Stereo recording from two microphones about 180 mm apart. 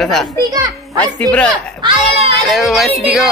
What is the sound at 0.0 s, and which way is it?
Speech, centre (ahead or behind).